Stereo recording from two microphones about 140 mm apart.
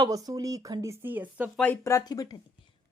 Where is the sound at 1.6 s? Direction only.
15° left (ahead or behind).